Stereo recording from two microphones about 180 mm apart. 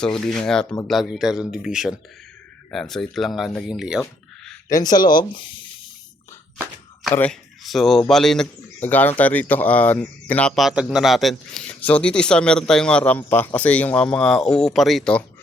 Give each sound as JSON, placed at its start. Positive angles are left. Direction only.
{"t": 0.0, "sound": "speech", "side_deg": 5}
{"t": 4.7, "sound": "speech", "side_deg": 20}
{"t": 7.1, "sound": "speech", "side_deg": 5}